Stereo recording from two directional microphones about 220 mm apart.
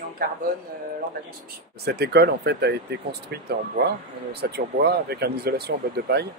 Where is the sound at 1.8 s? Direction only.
45° right (ahead or behind).